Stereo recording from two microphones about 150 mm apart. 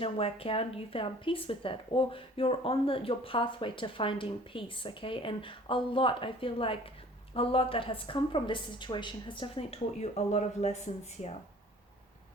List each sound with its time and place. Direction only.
0.0 s speech: 40° left (ahead or behind)